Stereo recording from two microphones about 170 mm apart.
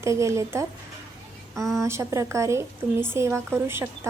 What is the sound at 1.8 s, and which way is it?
A woman's voice, 15° right (ahead or behind).